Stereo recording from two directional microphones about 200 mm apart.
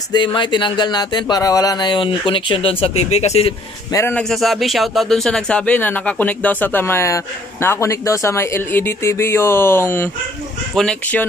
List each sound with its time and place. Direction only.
0.1 s speech: 25° left (ahead or behind)
3.9 s a man's voice: 10° left (ahead or behind)